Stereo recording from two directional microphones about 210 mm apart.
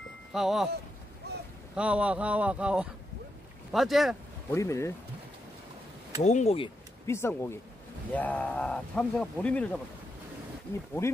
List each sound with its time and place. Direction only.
0.3 s speech: centre (ahead or behind)
1.8 s a man's voice: 5° right (ahead or behind)
4.5 s speech: 15° left (ahead or behind)
6.2 s speech: 30° left (ahead or behind)
7.1 s speech: 10° left (ahead or behind)
11.0 s speech: 15° left (ahead or behind)